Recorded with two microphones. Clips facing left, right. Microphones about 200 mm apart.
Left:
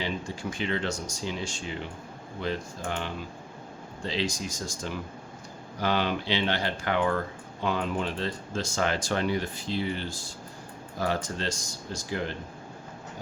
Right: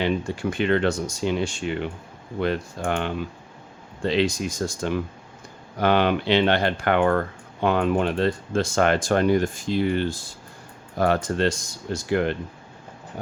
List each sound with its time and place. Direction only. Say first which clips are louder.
0.0 s speech: right 8 dB; 60° right (ahead or behind)